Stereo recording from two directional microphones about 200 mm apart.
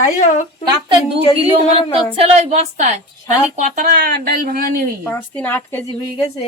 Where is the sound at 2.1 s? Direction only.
30° right (ahead or behind).